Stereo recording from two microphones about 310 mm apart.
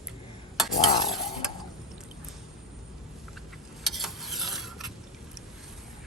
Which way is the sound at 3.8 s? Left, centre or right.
Centre.